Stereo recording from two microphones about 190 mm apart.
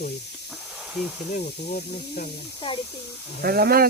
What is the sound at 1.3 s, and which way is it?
Speech, 50° left (ahead or behind).